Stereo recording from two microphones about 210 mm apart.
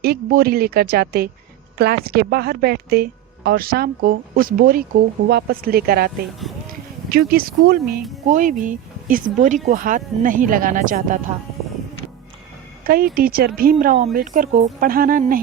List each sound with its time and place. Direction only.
0.0 s a woman's voice: 45° right (ahead or behind)
7.1 s a woman's voice: 45° right (ahead or behind)
12.8 s a woman's voice: 45° right (ahead or behind)